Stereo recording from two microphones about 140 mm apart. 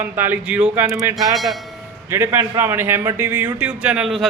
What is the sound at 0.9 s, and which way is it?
Speech, 25° right (ahead or behind).